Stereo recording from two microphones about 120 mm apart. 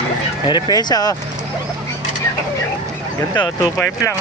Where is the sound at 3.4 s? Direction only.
40° left (ahead or behind).